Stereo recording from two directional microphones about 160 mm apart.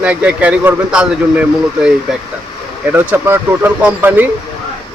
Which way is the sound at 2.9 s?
15° right (ahead or behind).